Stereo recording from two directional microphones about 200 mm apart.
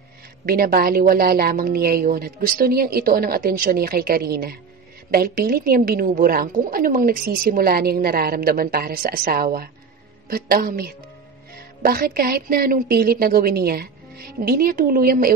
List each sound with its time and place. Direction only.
0.5 s a woman's voice: 50° right (ahead or behind)